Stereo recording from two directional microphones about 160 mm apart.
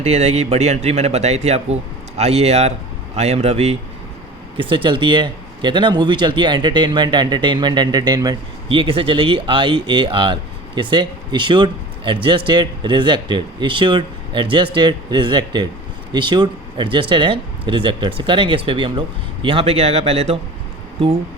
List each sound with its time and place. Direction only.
0.0 s speech: 40° right (ahead or behind)